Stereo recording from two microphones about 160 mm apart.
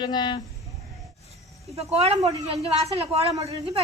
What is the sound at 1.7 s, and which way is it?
Speech, 40° right (ahead or behind).